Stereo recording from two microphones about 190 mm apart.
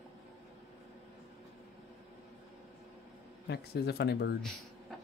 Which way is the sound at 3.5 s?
60° left (ahead or behind).